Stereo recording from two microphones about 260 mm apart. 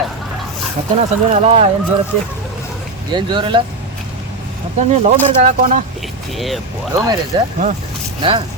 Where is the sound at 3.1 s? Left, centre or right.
Centre.